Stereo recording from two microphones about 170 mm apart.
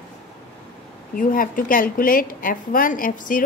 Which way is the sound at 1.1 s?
55° left (ahead or behind).